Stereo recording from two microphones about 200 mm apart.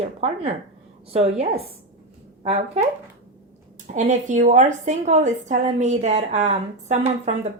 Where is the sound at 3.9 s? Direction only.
35° right (ahead or behind).